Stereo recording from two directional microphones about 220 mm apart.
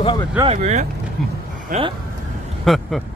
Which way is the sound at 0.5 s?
30° right (ahead or behind).